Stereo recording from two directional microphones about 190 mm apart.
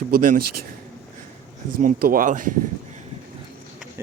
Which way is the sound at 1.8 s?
45° right (ahead or behind).